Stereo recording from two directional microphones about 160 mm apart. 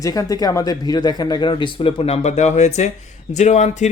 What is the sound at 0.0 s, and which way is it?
Speech, 20° left (ahead or behind).